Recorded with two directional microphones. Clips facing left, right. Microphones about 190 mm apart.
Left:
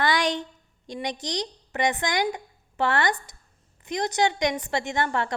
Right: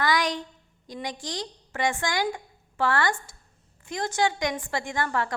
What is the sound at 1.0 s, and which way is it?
A woman's voice, 20° left (ahead or behind).